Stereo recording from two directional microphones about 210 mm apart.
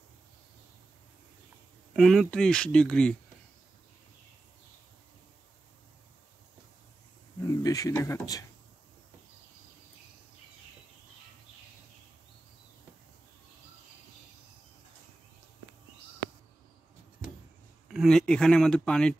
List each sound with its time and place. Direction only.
2.0 s speech: centre (ahead or behind)
7.4 s speech: 15° left (ahead or behind)
17.8 s speech: centre (ahead or behind)